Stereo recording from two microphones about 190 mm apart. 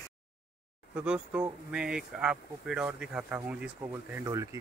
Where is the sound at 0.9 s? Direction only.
5° right (ahead or behind).